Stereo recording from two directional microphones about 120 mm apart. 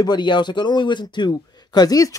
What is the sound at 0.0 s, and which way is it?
Speech, 40° left (ahead or behind).